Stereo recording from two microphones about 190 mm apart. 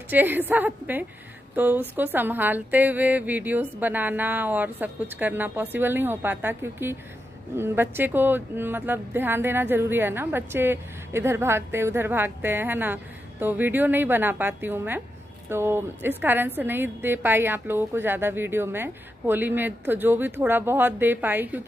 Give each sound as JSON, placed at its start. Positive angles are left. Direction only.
{"t": 0.1, "sound": "a woman's voice", "side_deg": -10}